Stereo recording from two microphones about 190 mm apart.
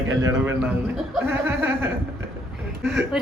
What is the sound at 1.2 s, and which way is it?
Speech, 10° right (ahead or behind).